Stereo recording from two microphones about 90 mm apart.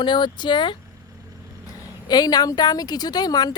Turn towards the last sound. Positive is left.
turn(degrees=50)  # may be behind; listen again after turning